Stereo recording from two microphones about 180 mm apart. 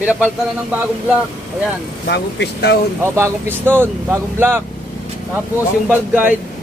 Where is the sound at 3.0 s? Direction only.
10° right (ahead or behind).